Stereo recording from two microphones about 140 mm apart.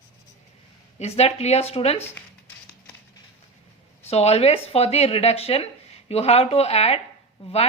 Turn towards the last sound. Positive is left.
turn(degrees=40)  # may be behind; listen again after turning